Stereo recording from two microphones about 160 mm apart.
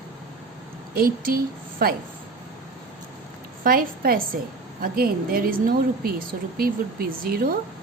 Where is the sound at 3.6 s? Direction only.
65° right (ahead or behind).